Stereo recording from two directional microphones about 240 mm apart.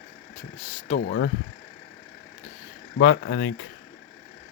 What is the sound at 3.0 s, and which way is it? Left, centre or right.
Speech, left.